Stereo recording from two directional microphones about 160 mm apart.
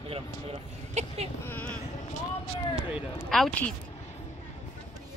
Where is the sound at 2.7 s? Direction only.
Centre (ahead or behind).